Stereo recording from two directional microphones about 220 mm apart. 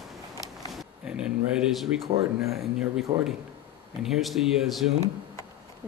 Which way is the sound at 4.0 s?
Centre (ahead or behind).